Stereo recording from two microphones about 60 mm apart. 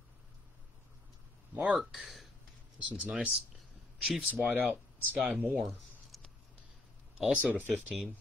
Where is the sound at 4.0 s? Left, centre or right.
Centre.